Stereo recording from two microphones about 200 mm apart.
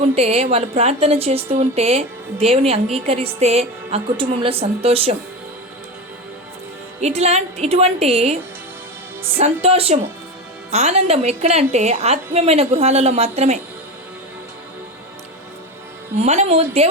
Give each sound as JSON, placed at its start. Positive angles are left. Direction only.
{"t": 0.2, "sound": "a woman's voice", "side_deg": -30}
{"t": 7.0, "sound": "a woman's voice", "side_deg": -35}
{"t": 16.1, "sound": "a woman's voice", "side_deg": -35}